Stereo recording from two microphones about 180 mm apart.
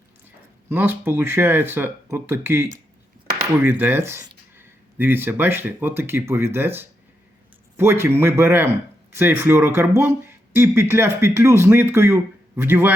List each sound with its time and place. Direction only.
0.7 s speech: 10° right (ahead or behind)